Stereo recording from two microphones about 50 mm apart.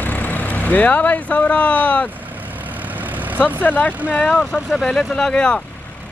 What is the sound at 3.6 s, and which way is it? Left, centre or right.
Speech, left.